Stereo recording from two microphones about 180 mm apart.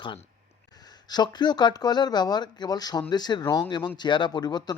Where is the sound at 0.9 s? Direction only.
25° left (ahead or behind).